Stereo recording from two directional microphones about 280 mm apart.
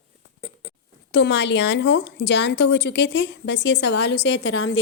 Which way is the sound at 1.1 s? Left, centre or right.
Left.